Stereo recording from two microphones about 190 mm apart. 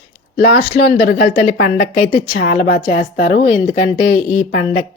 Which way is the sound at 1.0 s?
55° left (ahead or behind).